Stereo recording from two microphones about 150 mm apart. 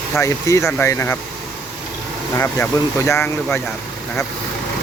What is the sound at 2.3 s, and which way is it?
Speech, 20° left (ahead or behind).